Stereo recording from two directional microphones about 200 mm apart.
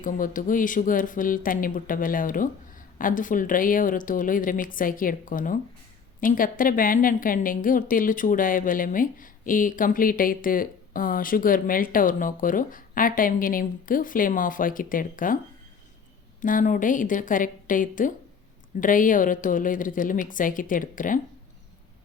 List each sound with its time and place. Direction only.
0.0 s a woman's voice: 40° left (ahead or behind)
16.4 s a woman's voice: 40° left (ahead or behind)